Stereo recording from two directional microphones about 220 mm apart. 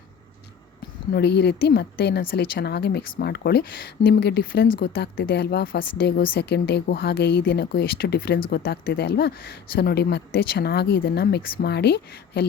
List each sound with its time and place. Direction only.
1.1 s speech: 50° left (ahead or behind)